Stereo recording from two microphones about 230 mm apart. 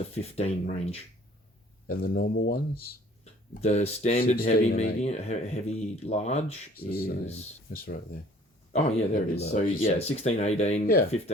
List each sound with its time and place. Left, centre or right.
0.1 s speech: left
1.9 s speech: left
3.6 s speech: left
8.7 s speech: left